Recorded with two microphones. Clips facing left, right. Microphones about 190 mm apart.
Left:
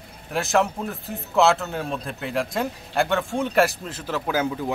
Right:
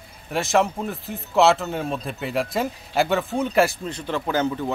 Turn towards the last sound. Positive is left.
turn(degrees=10)  # may be behind; listen again after turning